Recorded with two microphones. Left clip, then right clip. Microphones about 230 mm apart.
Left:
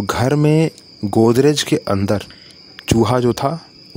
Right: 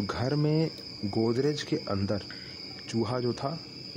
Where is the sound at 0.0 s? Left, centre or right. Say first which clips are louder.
Left 13 dB; left.